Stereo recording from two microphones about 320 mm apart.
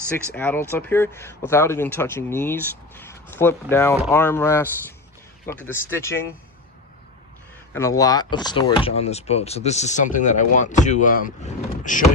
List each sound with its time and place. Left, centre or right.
0.1 s speech: centre
7.7 s speech: centre; by 12.0 s left